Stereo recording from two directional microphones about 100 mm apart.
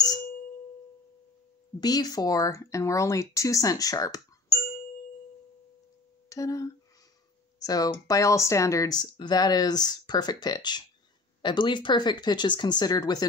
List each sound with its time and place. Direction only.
0.0 s ding: 40° left (ahead or behind)
1.8 s speech: 40° left (ahead or behind)
6.2 s speech: 35° left (ahead or behind)